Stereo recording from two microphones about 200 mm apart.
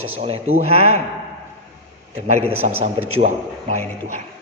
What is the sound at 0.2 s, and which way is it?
Speech, 30° right (ahead or behind).